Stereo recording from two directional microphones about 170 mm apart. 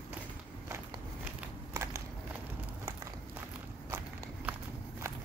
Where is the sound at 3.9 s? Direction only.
15° right (ahead or behind).